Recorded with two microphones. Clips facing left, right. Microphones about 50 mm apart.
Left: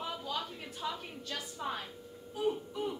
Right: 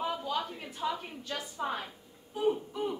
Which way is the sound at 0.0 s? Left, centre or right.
Centre.